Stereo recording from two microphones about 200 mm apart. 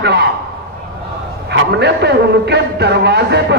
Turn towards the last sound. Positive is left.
turn(degrees=-55)  # may be behind; listen again after turning